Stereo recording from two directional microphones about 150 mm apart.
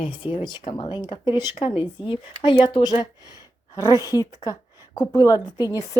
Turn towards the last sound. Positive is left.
turn(degrees=25)  # may be behind; listen again after turning